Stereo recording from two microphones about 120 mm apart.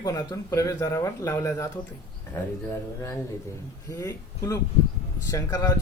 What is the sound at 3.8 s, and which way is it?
Speech, 25° left (ahead or behind).